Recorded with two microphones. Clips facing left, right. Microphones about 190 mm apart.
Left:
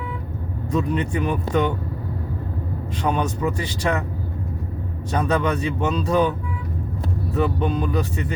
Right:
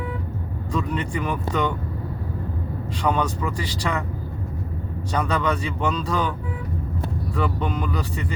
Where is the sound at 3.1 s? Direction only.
25° left (ahead or behind).